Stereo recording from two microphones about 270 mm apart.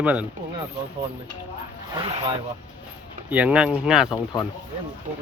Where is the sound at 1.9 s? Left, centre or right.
Centre.